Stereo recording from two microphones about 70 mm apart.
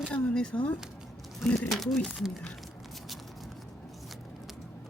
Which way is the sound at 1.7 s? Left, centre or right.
Centre.